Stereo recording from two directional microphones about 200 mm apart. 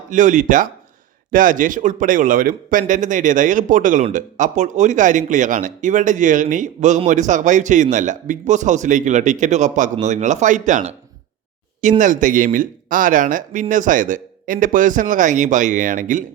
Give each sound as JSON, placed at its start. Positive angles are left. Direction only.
{"t": 0.1, "sound": "speech", "side_deg": -40}